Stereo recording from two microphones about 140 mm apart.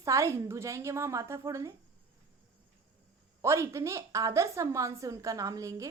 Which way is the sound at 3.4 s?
20° right (ahead or behind).